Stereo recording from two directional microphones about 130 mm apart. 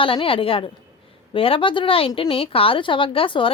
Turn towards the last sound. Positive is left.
turn(degrees=40)  # may be behind; listen again after turning